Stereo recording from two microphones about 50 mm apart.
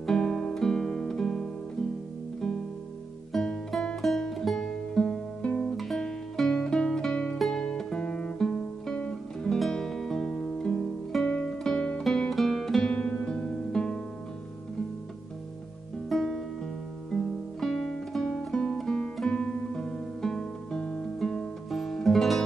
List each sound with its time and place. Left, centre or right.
0.0 s music: centre
3.3 s music: centre
7.3 s music: centre
7.6 s music: centre
8.4 s guitar: centre
9.0 s music: centre
12.9 s music: left
16.1 s music: centre